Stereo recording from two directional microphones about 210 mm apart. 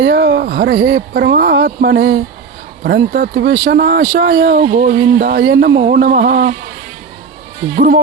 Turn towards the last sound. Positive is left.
turn(degrees=-45)  # may be behind; listen again after turning